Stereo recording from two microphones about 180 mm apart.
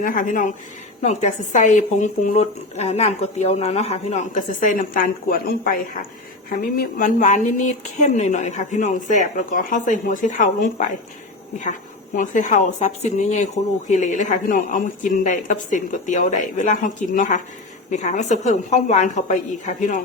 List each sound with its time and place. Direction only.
0.0 s speech: 50° left (ahead or behind)
12.1 s speech: 45° left (ahead or behind)